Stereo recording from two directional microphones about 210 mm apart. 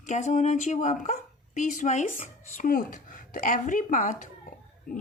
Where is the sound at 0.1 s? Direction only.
35° left (ahead or behind).